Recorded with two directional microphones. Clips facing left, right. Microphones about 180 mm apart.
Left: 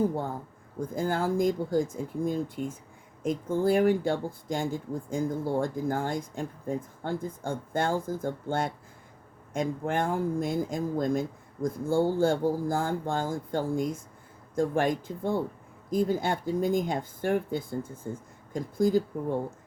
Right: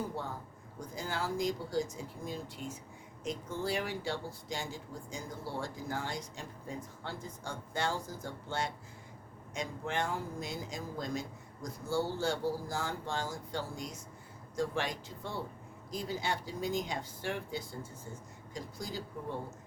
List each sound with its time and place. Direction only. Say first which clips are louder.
0.0 s speech: left 10 dB; 50° left (ahead or behind)